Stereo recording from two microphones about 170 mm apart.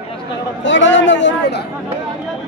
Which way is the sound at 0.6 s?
90° left.